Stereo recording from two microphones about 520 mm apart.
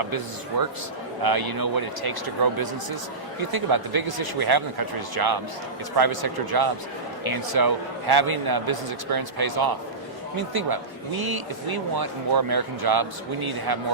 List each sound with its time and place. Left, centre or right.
0.5 s a man's voice: right